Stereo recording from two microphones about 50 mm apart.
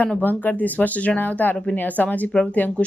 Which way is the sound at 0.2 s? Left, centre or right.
Left.